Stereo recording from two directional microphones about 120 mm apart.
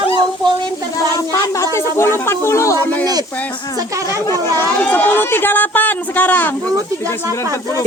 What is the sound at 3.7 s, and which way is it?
Speech, 25° right (ahead or behind).